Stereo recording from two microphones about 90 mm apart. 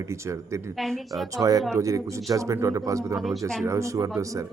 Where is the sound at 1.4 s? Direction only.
45° right (ahead or behind).